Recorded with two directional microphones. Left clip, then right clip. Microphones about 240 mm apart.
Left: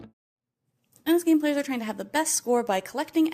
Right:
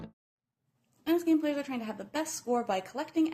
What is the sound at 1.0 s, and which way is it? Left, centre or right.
Speech, left.